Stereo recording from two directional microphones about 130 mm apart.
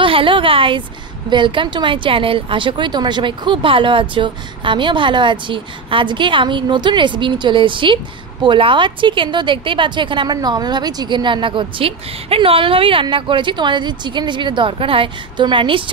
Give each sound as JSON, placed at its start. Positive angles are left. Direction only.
{"t": 0.0, "sound": "a woman's voice", "side_deg": -40}